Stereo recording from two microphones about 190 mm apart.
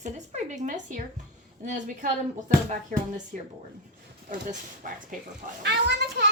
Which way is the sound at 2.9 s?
40° right (ahead or behind).